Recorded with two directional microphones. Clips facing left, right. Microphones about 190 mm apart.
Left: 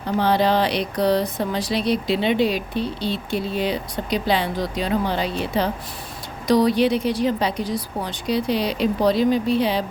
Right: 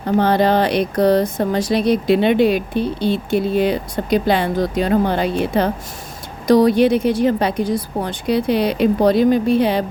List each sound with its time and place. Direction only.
0.2 s speech: 50° right (ahead or behind)